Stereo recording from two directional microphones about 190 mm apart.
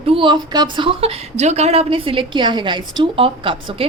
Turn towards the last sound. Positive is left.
turn(degrees=-25)  # may be behind; listen again after turning